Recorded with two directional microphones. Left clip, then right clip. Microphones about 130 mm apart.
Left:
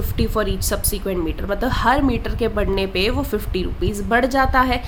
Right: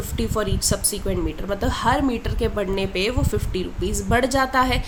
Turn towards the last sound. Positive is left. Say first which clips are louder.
# left 2 dB
turn(degrees=25)  # may be behind; listen again after turning